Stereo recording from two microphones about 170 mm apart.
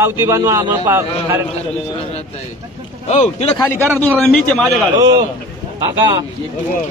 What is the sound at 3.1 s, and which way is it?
Speech, 40° left (ahead or behind).